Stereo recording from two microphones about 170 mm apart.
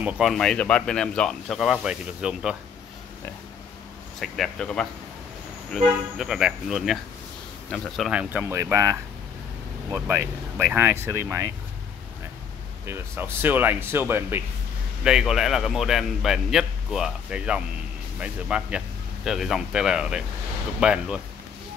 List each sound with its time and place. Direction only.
0.0 s speech: centre (ahead or behind)
4.2 s speech: 5° left (ahead or behind); by 11.5 s 15° right (ahead or behind)
12.8 s speech: 15° right (ahead or behind)
15.0 s speech: 5° right (ahead or behind)